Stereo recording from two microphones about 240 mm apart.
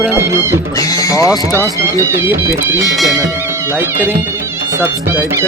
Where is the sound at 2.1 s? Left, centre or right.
Centre.